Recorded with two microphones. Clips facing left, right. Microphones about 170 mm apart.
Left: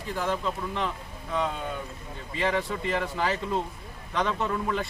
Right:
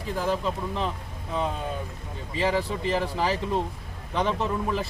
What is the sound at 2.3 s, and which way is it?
A man's voice, 30° right (ahead or behind).